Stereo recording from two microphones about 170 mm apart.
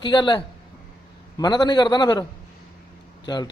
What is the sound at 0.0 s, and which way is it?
A man's voice, 25° left (ahead or behind).